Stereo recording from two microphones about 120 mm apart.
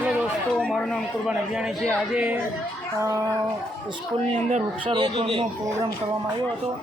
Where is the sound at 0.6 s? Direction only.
5° left (ahead or behind); by 2.4 s 10° right (ahead or behind).